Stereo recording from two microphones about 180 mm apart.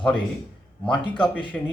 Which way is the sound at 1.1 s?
25° left (ahead or behind).